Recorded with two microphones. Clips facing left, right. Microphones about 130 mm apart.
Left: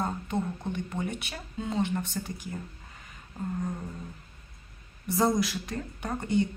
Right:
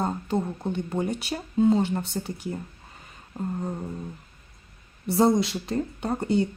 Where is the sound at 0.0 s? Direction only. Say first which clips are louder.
Right 4 dB; 30° right (ahead or behind).